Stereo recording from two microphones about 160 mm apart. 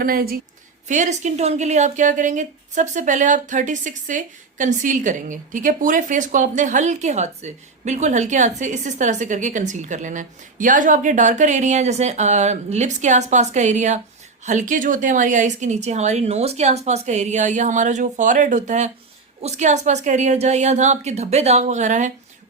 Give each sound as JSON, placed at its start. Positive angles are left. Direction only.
{"t": 0.0, "sound": "a woman's voice", "side_deg": -65}
{"t": 0.9, "sound": "a woman's voice", "side_deg": -50}